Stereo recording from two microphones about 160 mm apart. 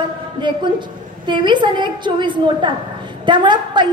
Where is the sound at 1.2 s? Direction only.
30° right (ahead or behind).